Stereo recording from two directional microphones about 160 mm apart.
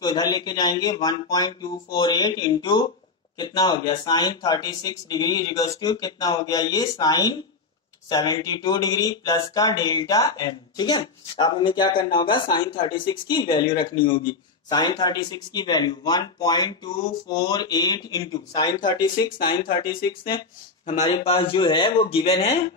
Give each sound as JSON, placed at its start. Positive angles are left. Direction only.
{"t": 0.0, "sound": "speech", "side_deg": 25}